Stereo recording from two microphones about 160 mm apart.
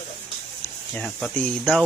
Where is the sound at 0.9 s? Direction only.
5° left (ahead or behind).